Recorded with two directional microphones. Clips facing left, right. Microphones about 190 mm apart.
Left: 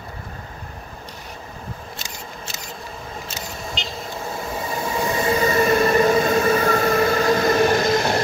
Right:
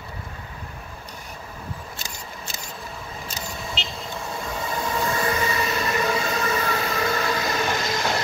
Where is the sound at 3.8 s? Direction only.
5° right (ahead or behind).